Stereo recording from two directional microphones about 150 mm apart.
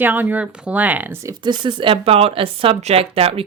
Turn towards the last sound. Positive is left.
turn(degrees=-40)  # may be behind; listen again after turning